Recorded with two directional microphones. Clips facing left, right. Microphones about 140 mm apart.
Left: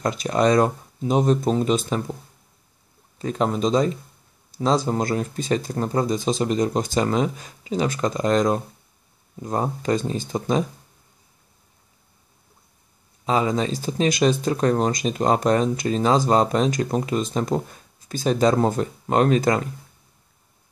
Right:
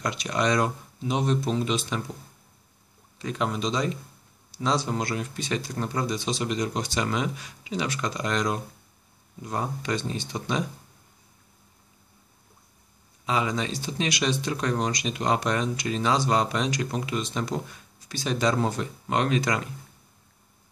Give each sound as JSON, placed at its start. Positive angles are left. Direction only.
{"t": 0.0, "sound": "speech", "side_deg": 45}
{"t": 3.2, "sound": "speech", "side_deg": 40}
{"t": 13.2, "sound": "speech", "side_deg": 40}